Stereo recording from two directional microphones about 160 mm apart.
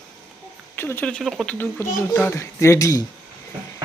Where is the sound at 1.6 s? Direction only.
15° left (ahead or behind).